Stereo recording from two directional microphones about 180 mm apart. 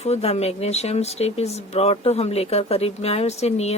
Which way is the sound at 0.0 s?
35° left (ahead or behind).